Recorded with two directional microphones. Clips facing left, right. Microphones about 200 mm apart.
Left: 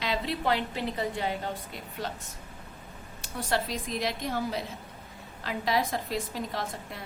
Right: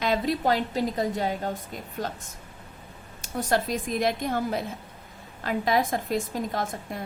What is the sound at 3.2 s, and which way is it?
A woman's voice, 45° right (ahead or behind).